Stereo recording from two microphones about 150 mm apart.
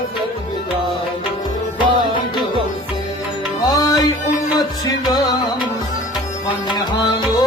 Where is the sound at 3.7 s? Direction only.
25° left (ahead or behind).